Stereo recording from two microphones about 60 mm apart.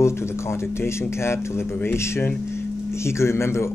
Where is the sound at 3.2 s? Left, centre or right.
Left.